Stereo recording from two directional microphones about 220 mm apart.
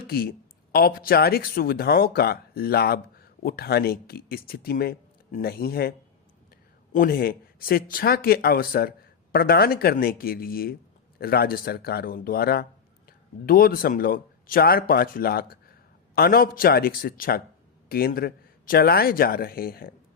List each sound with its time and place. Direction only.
0.1 s speech: 45° left (ahead or behind)
6.9 s a man's voice: 40° left (ahead or behind)